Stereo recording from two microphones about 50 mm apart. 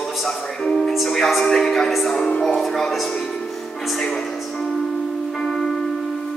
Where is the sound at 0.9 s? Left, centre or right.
Centre.